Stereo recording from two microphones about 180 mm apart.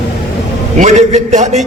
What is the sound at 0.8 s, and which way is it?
Speech, 40° right (ahead or behind).